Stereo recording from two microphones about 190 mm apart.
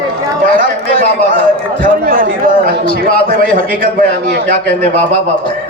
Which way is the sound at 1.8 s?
50° right (ahead or behind).